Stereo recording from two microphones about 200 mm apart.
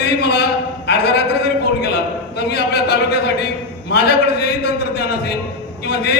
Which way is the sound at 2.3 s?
55° left (ahead or behind).